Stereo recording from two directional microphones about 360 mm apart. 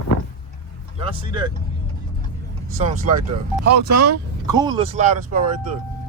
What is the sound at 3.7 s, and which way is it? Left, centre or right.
Speech, right.